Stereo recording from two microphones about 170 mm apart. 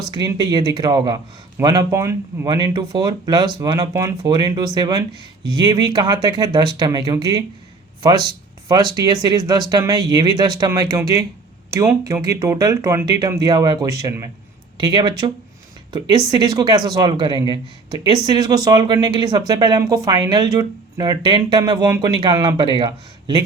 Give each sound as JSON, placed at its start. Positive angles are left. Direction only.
{"t": 0.1, "sound": "speech", "side_deg": -25}